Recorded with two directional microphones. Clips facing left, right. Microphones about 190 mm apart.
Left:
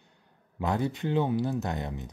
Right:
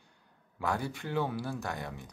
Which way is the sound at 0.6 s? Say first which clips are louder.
Left 5 dB; 20° left (ahead or behind).